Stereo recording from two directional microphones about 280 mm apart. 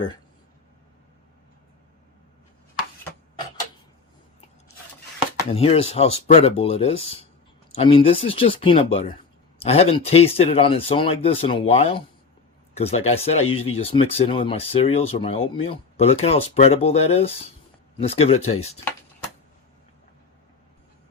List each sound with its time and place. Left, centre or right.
5.5 s speech: left